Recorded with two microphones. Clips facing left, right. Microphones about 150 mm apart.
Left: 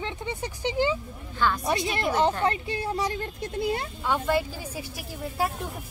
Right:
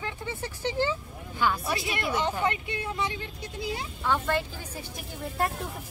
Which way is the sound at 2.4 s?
35° left (ahead or behind).